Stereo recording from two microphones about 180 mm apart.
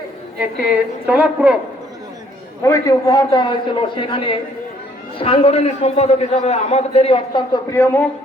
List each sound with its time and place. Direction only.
0.3 s a woman's voice: 5° right (ahead or behind)
2.6 s a man's voice: 15° left (ahead or behind)